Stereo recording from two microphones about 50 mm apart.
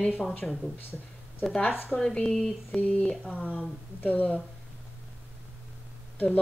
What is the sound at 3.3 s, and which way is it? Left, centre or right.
Speech, left.